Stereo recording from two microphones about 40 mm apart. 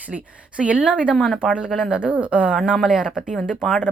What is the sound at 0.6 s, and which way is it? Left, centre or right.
Speech, right.